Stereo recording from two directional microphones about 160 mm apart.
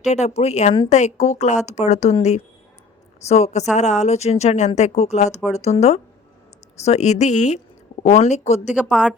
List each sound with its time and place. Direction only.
0.0 s a woman's voice: 45° left (ahead or behind)
8.9 s speech: 5° left (ahead or behind)